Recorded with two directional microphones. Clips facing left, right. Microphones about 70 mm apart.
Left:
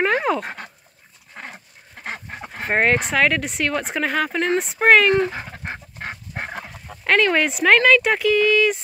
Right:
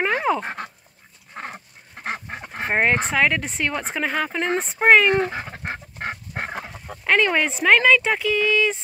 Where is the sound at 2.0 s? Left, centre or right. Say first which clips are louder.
Right 2 dB; centre.